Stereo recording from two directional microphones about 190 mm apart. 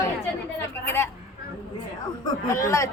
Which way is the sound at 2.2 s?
15° left (ahead or behind).